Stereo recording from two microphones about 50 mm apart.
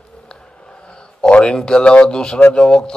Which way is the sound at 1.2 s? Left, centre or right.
Centre.